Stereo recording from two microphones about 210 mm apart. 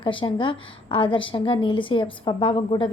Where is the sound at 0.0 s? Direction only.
25° left (ahead or behind).